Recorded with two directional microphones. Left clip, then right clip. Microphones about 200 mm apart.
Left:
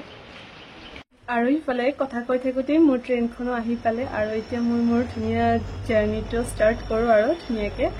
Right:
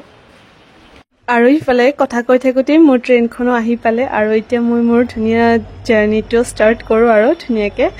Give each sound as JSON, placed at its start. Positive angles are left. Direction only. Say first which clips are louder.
{"t": 1.2, "sound": "speech", "louder": "right 12 dB", "side_deg": -55}